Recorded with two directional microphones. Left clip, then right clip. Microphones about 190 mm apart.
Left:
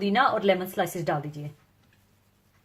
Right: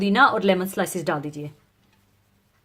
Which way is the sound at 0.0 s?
45° right (ahead or behind).